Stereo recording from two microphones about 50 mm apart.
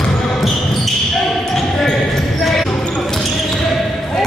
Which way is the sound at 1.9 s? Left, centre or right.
Centre.